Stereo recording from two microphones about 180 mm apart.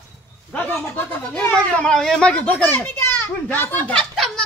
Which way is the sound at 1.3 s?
5° left (ahead or behind).